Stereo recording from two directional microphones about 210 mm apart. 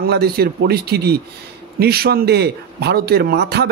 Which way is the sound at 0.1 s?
50° right (ahead or behind).